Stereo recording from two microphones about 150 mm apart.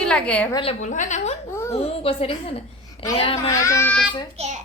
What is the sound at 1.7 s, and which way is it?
A child's voice, 40° left (ahead or behind).